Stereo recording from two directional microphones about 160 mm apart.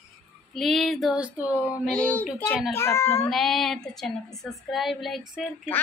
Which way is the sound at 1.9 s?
5° left (ahead or behind).